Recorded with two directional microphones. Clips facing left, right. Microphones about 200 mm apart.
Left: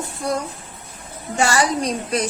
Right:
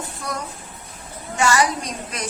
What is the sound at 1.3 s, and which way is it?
Speech, 30° left (ahead or behind).